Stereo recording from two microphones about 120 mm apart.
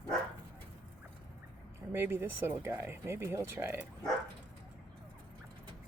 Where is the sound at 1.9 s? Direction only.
20° right (ahead or behind).